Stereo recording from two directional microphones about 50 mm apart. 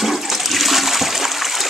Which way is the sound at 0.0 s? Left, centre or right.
Centre.